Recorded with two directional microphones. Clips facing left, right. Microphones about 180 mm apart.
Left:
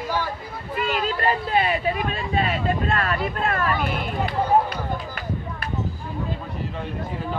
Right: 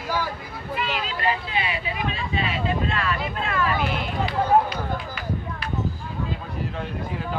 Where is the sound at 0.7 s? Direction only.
45° left (ahead or behind).